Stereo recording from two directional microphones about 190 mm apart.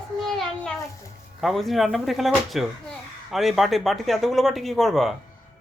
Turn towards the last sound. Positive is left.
turn(degrees=0)  # may be behind; listen again after turning